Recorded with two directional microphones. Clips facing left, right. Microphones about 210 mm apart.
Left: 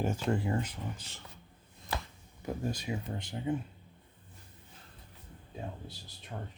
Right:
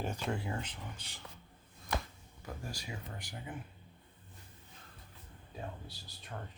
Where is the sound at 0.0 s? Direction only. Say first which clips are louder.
Left 6 dB; 5° left (ahead or behind).